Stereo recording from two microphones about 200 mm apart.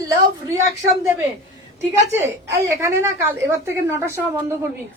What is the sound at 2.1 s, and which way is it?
A woman's voice, 10° right (ahead or behind).